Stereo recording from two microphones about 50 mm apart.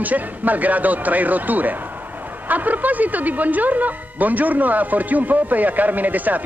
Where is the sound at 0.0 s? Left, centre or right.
Right.